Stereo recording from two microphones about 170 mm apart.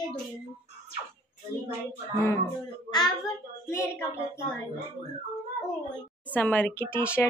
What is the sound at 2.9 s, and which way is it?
Child singing, 25° left (ahead or behind).